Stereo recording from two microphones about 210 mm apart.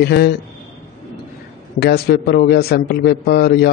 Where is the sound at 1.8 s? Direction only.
50° left (ahead or behind).